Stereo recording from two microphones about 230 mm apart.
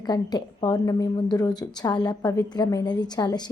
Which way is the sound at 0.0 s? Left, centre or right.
Centre.